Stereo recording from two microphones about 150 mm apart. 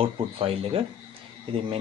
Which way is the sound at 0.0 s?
40° right (ahead or behind).